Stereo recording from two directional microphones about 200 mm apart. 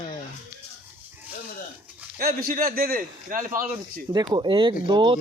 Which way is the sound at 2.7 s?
45° right (ahead or behind).